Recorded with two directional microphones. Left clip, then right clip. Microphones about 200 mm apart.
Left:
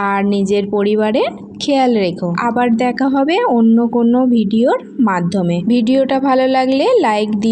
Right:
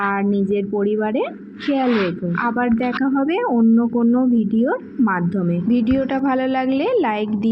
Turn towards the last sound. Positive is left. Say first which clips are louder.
# left 6 dB
turn(degrees=35)  # may be behind; listen again after turning